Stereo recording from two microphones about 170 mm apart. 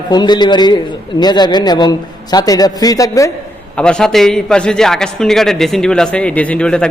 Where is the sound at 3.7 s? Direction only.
5° left (ahead or behind).